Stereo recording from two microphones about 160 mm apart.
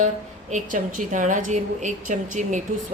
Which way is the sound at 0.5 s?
55° right (ahead or behind).